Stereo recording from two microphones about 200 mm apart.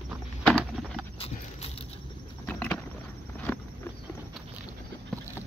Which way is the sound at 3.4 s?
10° left (ahead or behind).